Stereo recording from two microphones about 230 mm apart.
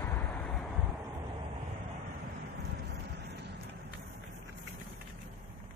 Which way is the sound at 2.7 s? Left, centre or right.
Right.